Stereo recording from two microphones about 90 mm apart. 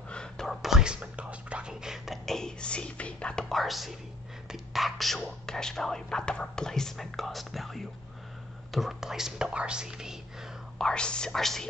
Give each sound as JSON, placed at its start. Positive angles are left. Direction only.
{"t": 0.1, "sound": "whispering", "side_deg": 5}
{"t": 4.5, "sound": "speech", "side_deg": 0}
{"t": 10.8, "sound": "speech", "side_deg": 10}